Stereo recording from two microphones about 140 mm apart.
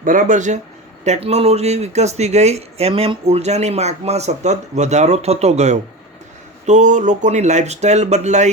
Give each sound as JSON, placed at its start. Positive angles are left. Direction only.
{"t": 0.0, "sound": "speech", "side_deg": -70}